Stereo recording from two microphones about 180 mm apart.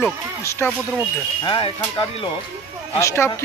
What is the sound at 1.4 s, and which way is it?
Speech, 30° left (ahead or behind).